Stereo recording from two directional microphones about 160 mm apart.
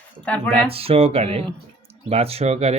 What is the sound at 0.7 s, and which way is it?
Speech, 35° right (ahead or behind).